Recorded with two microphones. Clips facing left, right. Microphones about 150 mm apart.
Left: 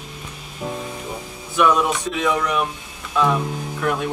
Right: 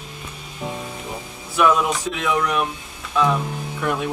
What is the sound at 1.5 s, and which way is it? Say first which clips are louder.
Speech: even; centre (ahead or behind).